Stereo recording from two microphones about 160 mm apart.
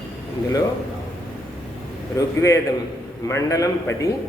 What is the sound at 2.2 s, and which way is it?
A man's voice, 20° left (ahead or behind).